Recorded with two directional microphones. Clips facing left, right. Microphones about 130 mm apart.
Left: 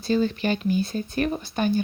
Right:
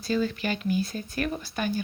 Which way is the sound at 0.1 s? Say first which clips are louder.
Left 4 dB; 30° left (ahead or behind).